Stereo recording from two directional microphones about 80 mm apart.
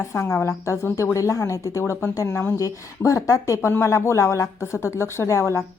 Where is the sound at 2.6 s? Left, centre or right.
Left.